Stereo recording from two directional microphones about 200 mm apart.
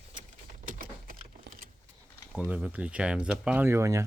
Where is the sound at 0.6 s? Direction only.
40° right (ahead or behind).